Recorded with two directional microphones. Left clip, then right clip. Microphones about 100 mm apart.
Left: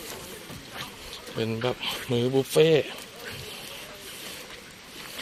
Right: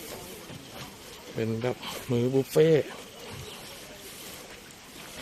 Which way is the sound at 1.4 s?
20° right (ahead or behind).